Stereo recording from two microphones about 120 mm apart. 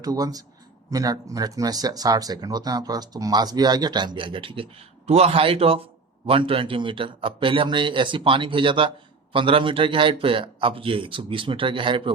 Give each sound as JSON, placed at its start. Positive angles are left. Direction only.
{"t": 0.0, "sound": "speech", "side_deg": -30}